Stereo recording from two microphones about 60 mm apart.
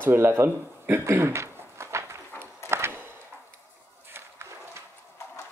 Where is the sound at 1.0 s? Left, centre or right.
Right.